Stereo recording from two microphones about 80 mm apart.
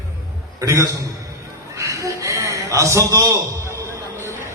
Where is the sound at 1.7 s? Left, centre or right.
Right.